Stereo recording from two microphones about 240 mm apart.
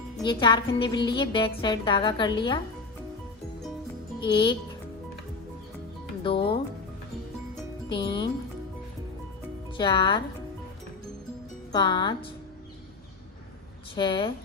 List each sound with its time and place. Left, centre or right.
0.2 s a woman's voice: centre
4.2 s a woman's voice: centre
6.2 s a woman's voice: left
7.9 s a woman's voice: centre
9.7 s a woman's voice: centre
11.7 s a woman's voice: centre
13.9 s a woman's voice: centre